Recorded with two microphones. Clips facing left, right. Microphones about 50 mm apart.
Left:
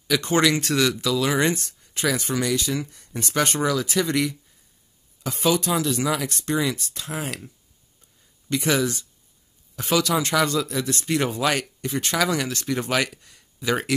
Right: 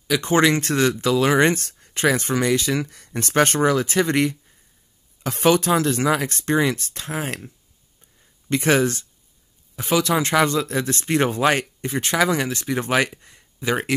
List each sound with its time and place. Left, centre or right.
0.2 s speech: right
2.7 s speech: right
3.1 s speech: right
8.5 s speech: right
9.8 s speech: centre
10.0 s speech: right